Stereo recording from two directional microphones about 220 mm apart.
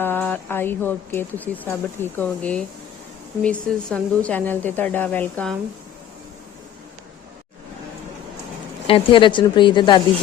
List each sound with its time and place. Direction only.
0.0 s speech: 10° left (ahead or behind)
8.9 s speech: 20° left (ahead or behind)